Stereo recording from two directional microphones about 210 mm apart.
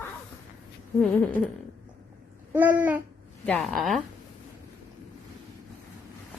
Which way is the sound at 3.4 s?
5° left (ahead or behind).